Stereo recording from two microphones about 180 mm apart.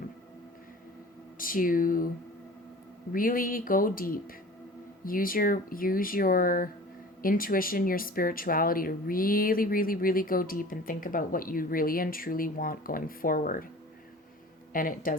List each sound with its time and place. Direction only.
1.4 s speech: 50° left (ahead or behind)
3.1 s speech: 50° left (ahead or behind)
14.7 s speech: 50° left (ahead or behind)